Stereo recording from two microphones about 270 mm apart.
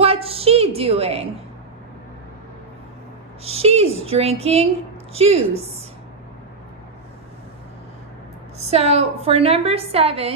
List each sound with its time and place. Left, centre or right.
0.0 s a sound: right
3.4 s a woman's voice: right
8.6 s a woman's voice: right